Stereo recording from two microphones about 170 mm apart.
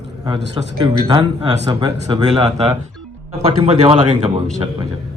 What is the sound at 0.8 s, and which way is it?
Speech, 30° right (ahead or behind).